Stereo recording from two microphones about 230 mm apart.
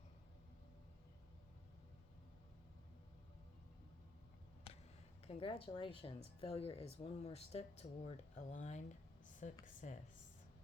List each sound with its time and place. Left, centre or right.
5.2 s speech: left